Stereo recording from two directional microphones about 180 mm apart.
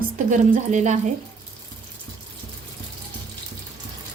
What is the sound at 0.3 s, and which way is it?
Speech, 45° right (ahead or behind).